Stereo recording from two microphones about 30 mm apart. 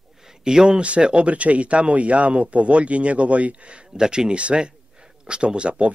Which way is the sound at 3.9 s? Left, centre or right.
Right.